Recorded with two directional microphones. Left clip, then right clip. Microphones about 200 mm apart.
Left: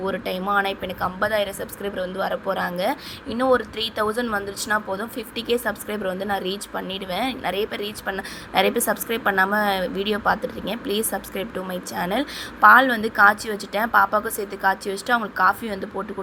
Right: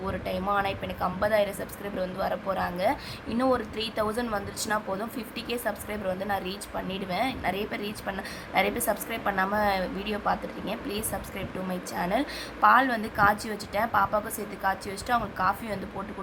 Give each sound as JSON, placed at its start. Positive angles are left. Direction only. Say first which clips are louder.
{"t": 0.0, "sound": "a woman's voice", "louder": "left 5 dB", "side_deg": 15}